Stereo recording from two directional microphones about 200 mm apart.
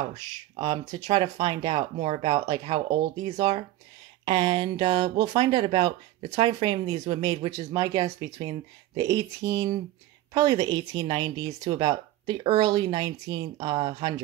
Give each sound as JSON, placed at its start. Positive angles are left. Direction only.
{"t": 0.1, "sound": "speech", "side_deg": -20}